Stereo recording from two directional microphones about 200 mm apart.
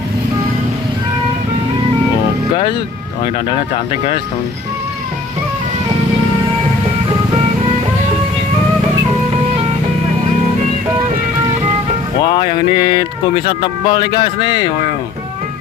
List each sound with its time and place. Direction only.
12.2 s speech: 20° left (ahead or behind)